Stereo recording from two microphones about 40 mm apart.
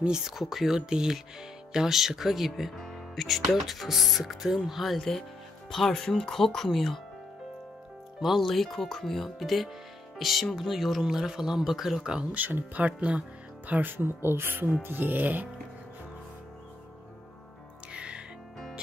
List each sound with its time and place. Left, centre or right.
0.1 s speech: centre
8.2 s speech: centre
12.4 s speech: right
14.8 s speech: right
17.9 s music: right